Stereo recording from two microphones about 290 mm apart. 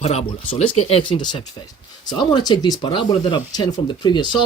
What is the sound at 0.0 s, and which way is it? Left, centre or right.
Speech, left.